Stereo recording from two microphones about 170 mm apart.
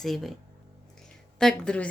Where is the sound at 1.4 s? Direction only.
5° left (ahead or behind).